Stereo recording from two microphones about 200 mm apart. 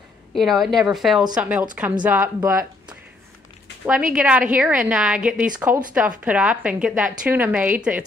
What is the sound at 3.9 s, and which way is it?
A woman's voice, 5° right (ahead or behind).